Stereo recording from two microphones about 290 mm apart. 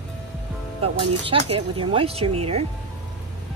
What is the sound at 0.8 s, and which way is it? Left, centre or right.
Speech, centre.